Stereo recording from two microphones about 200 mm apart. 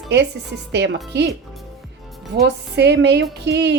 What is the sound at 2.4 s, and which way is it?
Speech, 55° right (ahead or behind).